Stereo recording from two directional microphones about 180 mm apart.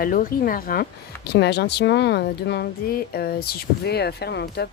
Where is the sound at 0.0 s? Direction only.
50° left (ahead or behind).